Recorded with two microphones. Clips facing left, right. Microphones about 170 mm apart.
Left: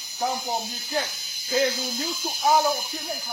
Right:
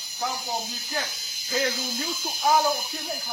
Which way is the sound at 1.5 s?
25° left (ahead or behind).